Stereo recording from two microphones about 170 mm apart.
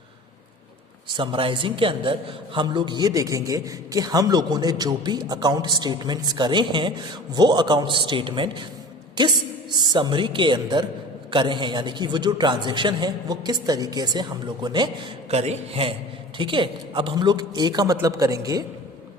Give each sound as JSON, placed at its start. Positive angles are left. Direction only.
{"t": 1.0, "sound": "a man's voice", "side_deg": -30}
{"t": 15.3, "sound": "a man's voice", "side_deg": -35}